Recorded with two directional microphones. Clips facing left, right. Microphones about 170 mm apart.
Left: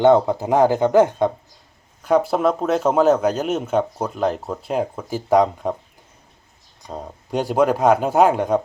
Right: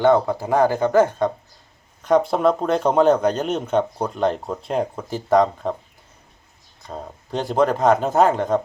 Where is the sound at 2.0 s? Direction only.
5° left (ahead or behind).